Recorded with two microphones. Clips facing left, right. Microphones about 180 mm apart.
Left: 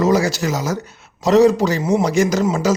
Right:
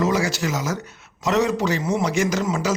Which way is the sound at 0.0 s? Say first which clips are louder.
Left 5 dB; 40° left (ahead or behind).